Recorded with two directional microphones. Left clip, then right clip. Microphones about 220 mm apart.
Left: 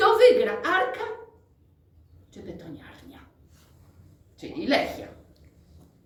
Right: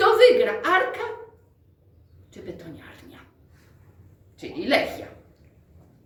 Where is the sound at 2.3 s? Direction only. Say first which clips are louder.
Right 2 dB; 15° right (ahead or behind).